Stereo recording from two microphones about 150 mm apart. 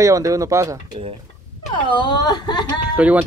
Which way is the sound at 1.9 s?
30° left (ahead or behind).